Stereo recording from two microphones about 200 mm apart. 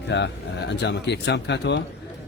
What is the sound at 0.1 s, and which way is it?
A man's voice, 60° left (ahead or behind).